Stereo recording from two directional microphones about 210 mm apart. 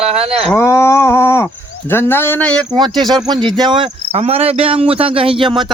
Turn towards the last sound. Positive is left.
turn(degrees=-25)  # may be behind; listen again after turning